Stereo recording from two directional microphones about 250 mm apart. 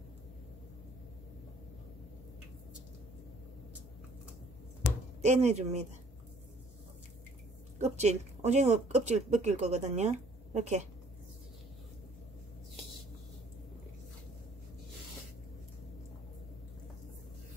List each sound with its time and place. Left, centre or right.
5.2 s speech: right
7.8 s speech: right